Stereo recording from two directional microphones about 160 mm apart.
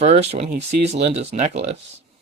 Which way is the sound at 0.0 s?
45° right (ahead or behind).